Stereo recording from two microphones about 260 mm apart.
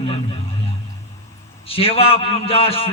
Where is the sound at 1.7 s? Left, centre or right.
Left.